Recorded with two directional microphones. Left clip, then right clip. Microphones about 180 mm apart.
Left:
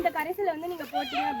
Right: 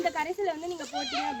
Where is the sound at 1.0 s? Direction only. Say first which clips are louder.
Left 1 dB; 30° left (ahead or behind).